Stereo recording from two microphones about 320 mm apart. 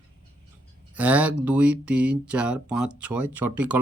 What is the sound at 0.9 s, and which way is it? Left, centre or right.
Speech, centre.